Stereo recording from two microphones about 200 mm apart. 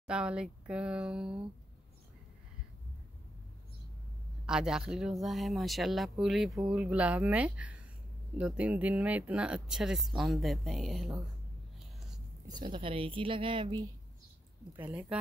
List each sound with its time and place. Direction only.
0.0 s speech: 5° right (ahead or behind)
4.5 s speech: 5° right (ahead or behind)
11.8 s a sound: centre (ahead or behind)
12.4 s speech: 25° right (ahead or behind)
14.8 s a woman's voice: 5° right (ahead or behind)